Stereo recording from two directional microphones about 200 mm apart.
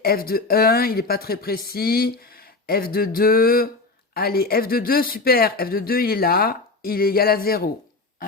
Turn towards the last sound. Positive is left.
turn(degrees=50)  # may be behind; listen again after turning